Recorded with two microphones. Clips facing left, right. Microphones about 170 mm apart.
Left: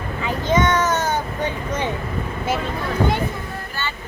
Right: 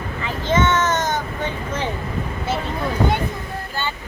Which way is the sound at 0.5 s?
15° left (ahead or behind).